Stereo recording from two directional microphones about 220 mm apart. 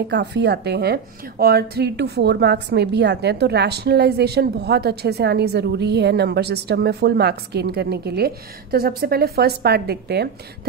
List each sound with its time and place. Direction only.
0.1 s speech: 50° right (ahead or behind)